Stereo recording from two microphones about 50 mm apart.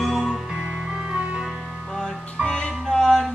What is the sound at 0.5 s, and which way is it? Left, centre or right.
Music, centre.